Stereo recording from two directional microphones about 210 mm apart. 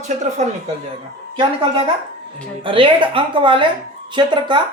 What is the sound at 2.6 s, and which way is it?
Speech, 25° right (ahead or behind).